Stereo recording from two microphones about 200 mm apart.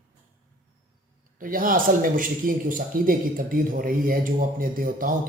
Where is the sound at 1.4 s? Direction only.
45° right (ahead or behind).